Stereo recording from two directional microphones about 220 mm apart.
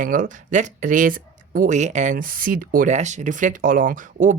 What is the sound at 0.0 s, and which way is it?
Speech, 35° right (ahead or behind).